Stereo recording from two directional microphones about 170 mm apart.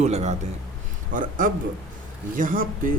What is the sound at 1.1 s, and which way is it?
Speech, 55° right (ahead or behind).